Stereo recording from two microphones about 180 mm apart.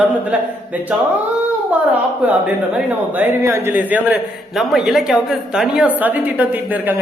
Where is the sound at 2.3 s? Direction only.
10° right (ahead or behind).